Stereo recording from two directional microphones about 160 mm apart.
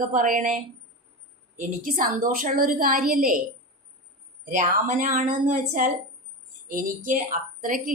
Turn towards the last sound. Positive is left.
turn(degrees=-60)  # may be behind; listen again after turning